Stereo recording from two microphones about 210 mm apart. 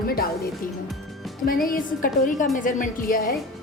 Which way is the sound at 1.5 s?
40° left (ahead or behind).